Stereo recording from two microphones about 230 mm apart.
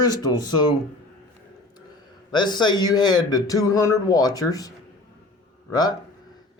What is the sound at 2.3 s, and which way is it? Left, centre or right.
Speech, centre.